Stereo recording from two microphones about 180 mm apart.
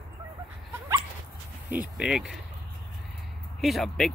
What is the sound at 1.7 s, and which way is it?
Speech, 5° right (ahead or behind).